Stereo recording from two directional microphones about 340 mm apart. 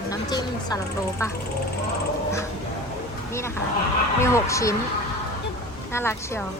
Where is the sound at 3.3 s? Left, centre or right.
Centre.